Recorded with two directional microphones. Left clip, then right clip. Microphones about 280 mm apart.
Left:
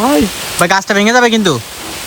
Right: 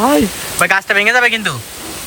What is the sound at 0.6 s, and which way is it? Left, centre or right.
Speech, centre.